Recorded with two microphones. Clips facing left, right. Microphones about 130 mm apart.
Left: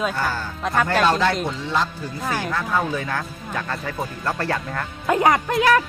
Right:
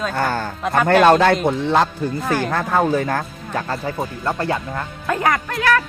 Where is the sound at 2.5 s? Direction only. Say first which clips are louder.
Right 6 dB; 50° right (ahead or behind); by 4.9 s 20° right (ahead or behind).